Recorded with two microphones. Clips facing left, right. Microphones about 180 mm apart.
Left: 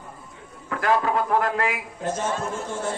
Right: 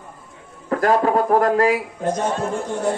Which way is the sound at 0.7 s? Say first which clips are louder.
Right 5 dB; 40° right (ahead or behind).